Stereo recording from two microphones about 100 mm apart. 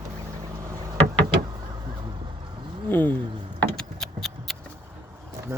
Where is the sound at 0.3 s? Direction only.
35° right (ahead or behind).